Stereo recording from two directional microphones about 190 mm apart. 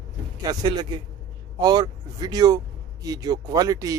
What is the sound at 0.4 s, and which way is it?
A man's voice, 20° right (ahead or behind).